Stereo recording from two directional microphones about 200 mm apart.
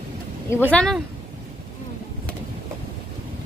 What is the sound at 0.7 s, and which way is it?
Speech, 5° left (ahead or behind).